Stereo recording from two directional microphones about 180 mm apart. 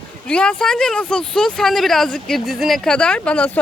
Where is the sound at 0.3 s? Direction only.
5° left (ahead or behind).